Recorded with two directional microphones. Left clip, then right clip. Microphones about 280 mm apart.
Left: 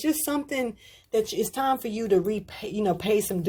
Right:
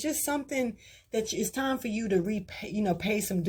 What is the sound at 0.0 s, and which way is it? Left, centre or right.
Speech, left.